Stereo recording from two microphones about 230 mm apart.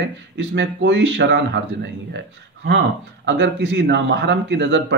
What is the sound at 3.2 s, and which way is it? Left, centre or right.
Speech, right.